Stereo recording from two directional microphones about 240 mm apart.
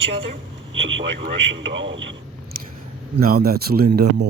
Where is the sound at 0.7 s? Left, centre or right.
Right.